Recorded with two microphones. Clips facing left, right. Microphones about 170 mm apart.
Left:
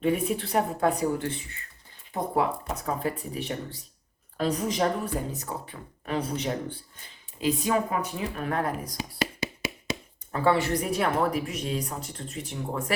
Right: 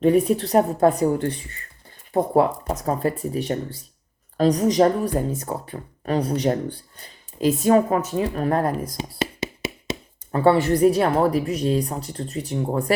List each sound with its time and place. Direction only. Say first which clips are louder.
0.0 s speech: right 8 dB; 40° right (ahead or behind)
2.1 s speech: right 8 dB; 40° right (ahead or behind)
9.0 s knock: right 4 dB; 25° right (ahead or behind)
10.5 s speech: right 10 dB; 30° right (ahead or behind)